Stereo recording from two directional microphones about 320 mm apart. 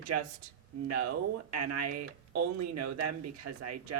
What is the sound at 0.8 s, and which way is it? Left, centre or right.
Speech, right.